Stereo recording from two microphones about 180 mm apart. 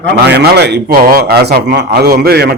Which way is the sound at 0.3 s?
65° right (ahead or behind).